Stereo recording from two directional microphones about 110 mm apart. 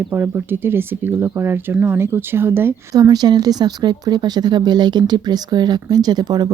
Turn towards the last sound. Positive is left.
turn(degrees=-40)  # may be behind; listen again after turning